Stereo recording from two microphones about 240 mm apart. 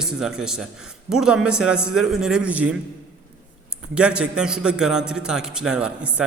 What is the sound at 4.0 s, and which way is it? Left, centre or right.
A man's voice, centre.